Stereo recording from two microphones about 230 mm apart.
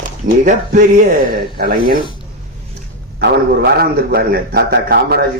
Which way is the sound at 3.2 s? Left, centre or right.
Right.